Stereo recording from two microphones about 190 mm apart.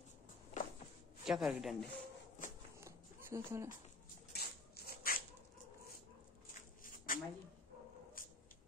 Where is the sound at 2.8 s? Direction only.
15° right (ahead or behind).